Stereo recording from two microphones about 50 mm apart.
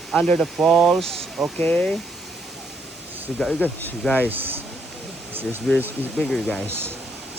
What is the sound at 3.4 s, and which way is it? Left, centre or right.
Speech, centre.